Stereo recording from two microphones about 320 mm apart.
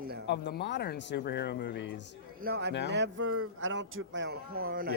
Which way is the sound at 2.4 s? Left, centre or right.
Right.